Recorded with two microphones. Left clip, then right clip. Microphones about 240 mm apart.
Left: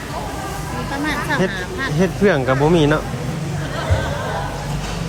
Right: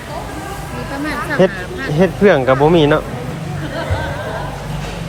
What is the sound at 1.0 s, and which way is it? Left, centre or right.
Speech, centre.